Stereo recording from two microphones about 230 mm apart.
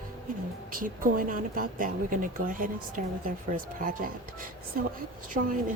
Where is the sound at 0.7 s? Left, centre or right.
Right.